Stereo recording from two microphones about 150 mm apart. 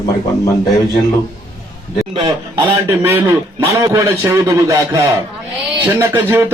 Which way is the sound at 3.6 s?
20° right (ahead or behind).